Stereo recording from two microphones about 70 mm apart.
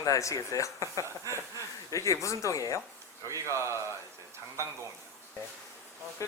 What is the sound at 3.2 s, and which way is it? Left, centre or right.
Speech, right.